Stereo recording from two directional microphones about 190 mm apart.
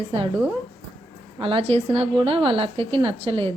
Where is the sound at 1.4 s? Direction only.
30° right (ahead or behind).